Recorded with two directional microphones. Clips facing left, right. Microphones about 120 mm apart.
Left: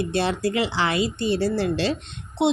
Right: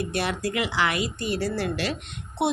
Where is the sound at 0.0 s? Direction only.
30° left (ahead or behind).